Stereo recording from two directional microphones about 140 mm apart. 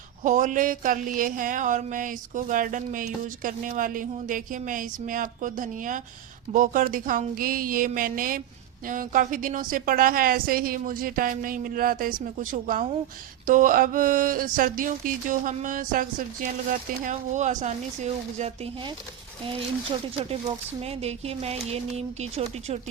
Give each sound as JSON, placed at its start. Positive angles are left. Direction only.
{"t": 0.2, "sound": "a sound", "side_deg": -65}
{"t": 6.5, "sound": "a woman's voice", "side_deg": -70}
{"t": 8.9, "sound": "a woman's voice", "side_deg": -70}
{"t": 13.5, "sound": "a sound", "side_deg": -75}
{"t": 17.0, "sound": "speech", "side_deg": -60}
{"t": 20.8, "sound": "speech", "side_deg": -45}